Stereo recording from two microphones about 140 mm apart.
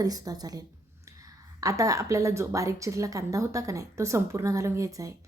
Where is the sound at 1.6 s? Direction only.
25° right (ahead or behind).